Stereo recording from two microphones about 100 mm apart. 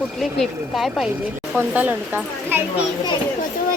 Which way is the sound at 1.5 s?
20° right (ahead or behind).